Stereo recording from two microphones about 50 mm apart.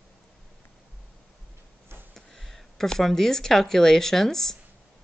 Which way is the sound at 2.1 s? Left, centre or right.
Centre.